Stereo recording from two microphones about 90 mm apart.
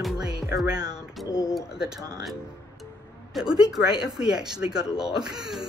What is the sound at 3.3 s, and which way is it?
Speech, 5° right (ahead or behind).